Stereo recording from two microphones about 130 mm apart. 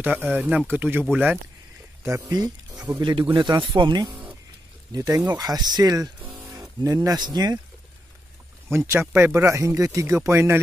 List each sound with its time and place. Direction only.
0.0 s speech: 10° right (ahead or behind)
2.0 s speech: 25° right (ahead or behind)
8.6 s speech: 20° right (ahead or behind)